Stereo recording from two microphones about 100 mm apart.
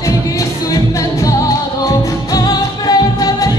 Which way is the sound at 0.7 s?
35° left (ahead or behind).